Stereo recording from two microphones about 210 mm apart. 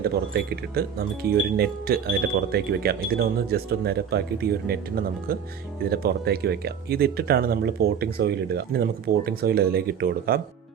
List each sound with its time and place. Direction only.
0.0 s speech: 50° right (ahead or behind)